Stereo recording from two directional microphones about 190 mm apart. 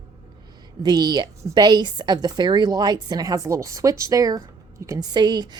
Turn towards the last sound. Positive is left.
turn(degrees=-20)  # may be behind; listen again after turning